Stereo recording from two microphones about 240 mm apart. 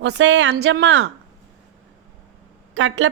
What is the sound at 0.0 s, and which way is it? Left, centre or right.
A woman's voice, right.